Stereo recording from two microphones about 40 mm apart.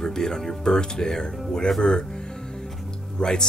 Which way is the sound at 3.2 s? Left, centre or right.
Left.